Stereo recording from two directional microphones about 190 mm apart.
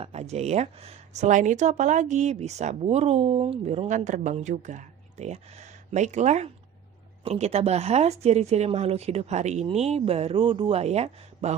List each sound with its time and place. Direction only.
0.0 s speech: 35° right (ahead or behind)